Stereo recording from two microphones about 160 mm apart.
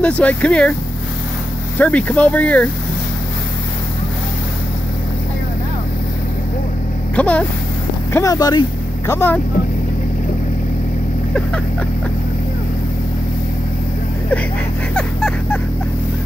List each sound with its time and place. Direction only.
0.0 s speech: 10° left (ahead or behind)
1.8 s speech: 10° left (ahead or behind)
7.2 s speech: 10° left (ahead or behind)
8.1 s speech: 20° left (ahead or behind)
15.0 s vehicle: 5° left (ahead or behind)